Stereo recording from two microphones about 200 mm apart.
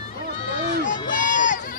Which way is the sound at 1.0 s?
40° left (ahead or behind).